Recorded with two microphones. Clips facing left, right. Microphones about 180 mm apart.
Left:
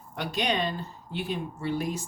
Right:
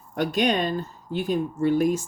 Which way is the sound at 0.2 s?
45° right (ahead or behind).